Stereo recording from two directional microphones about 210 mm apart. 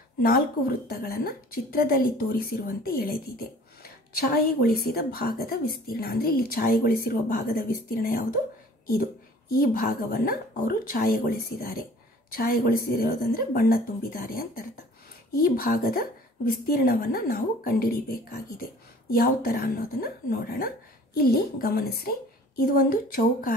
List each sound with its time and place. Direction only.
0.2 s speech: 45° left (ahead or behind)
9.6 s speech: 45° left (ahead or behind)